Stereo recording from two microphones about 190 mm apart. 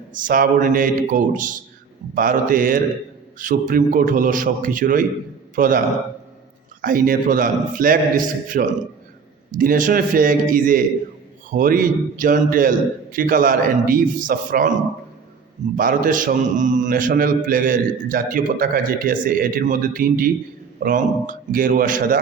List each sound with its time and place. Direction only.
0.1 s a man's voice: 45° right (ahead or behind)
6.8 s a man's voice: 45° right (ahead or behind)
15.8 s a man's voice: 45° right (ahead or behind)